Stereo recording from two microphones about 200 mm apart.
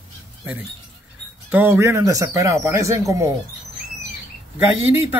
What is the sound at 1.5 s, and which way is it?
Speech, 10° right (ahead or behind).